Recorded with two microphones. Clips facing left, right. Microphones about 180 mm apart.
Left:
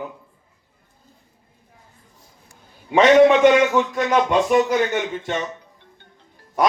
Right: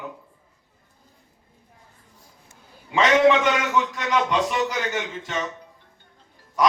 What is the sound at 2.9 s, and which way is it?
A man's voice, 50° left (ahead or behind).